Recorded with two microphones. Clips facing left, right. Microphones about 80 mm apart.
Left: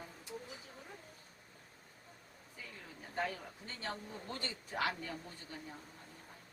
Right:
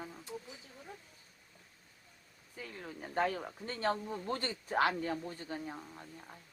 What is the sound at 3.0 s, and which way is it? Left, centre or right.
A man's voice, right.